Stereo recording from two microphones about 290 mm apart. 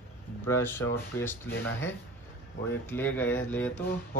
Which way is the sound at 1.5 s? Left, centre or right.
Left.